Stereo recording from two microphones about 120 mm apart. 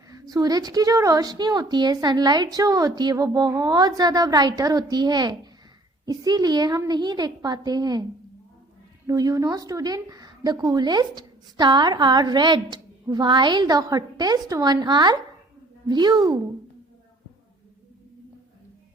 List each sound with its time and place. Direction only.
0.1 s speech: 30° right (ahead or behind)
9.0 s speech: 30° right (ahead or behind)